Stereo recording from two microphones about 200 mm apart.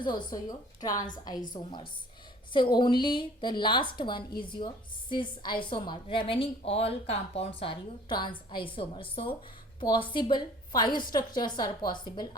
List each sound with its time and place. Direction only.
0.0 s a woman's voice: 20° left (ahead or behind)
2.5 s a woman's voice: 25° left (ahead or behind)